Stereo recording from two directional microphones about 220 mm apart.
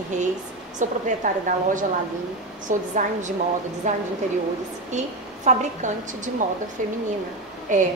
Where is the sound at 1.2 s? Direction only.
35° right (ahead or behind).